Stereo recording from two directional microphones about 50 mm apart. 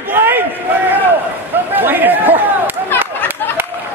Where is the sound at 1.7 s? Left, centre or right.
Right.